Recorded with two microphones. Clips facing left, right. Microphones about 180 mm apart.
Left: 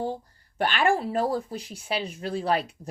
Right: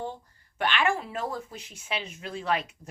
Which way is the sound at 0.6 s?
35° left (ahead or behind).